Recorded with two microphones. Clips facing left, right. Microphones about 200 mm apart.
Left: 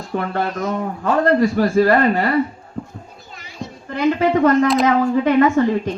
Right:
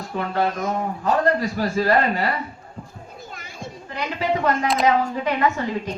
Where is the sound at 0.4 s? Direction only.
50° right (ahead or behind).